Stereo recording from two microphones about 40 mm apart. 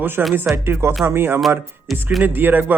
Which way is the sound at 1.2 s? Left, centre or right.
Right.